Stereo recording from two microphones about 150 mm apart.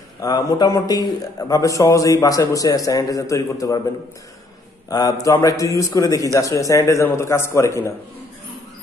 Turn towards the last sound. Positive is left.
turn(degrees=20)  # may be behind; listen again after turning